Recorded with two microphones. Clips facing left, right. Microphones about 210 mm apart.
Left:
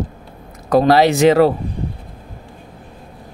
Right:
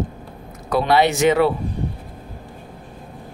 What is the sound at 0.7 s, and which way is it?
Speech, 40° left (ahead or behind).